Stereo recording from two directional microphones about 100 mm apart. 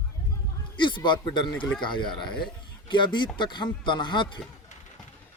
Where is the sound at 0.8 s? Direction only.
50° left (ahead or behind).